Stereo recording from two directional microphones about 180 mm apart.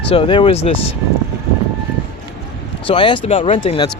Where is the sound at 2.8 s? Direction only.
30° left (ahead or behind).